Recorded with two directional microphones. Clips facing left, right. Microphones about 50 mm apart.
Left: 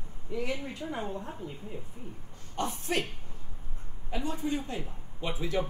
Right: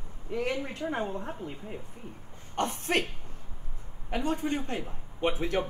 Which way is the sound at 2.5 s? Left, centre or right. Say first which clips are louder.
Right 3 dB; right.